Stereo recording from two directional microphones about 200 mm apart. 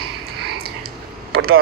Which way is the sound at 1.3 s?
90° right.